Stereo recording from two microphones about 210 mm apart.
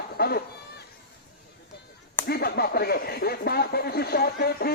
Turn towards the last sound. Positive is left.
turn(degrees=45)  # may be behind; listen again after turning